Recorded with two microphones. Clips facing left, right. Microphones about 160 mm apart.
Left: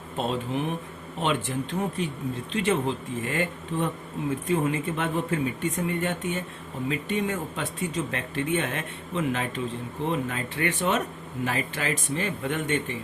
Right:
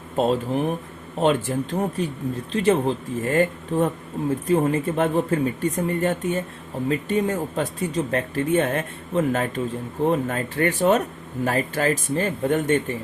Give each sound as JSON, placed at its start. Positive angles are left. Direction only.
{"t": 0.2, "sound": "speech", "side_deg": -40}